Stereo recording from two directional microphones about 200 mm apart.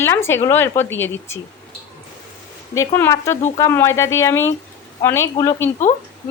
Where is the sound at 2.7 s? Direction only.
15° left (ahead or behind).